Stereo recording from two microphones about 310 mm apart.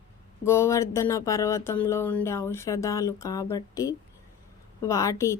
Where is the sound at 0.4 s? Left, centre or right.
Centre.